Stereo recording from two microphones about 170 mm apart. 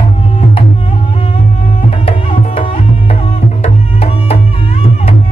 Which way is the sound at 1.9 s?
35° left (ahead or behind).